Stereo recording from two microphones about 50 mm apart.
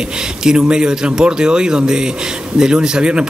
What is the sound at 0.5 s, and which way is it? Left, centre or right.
Speech, centre.